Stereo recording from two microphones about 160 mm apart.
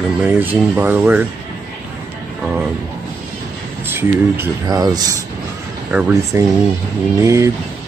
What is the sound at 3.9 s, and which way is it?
Speech, 15° right (ahead or behind).